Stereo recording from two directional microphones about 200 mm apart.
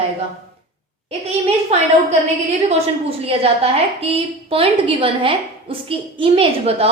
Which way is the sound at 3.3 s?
30° right (ahead or behind).